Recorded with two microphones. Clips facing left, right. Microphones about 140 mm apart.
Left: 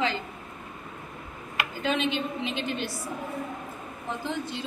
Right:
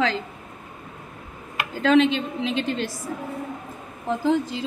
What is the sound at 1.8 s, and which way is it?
A woman's voice, 90° right.